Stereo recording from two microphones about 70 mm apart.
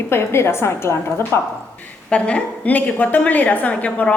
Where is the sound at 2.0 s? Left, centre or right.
Centre.